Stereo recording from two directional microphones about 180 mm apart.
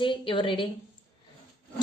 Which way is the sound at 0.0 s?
30° left (ahead or behind).